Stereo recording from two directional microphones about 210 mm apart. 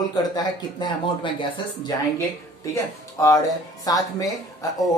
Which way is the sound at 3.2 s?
15° left (ahead or behind).